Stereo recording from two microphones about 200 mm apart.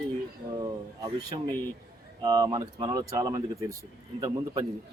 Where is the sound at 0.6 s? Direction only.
20° right (ahead or behind).